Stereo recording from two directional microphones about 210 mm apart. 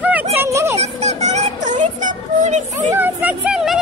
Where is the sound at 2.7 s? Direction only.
10° right (ahead or behind).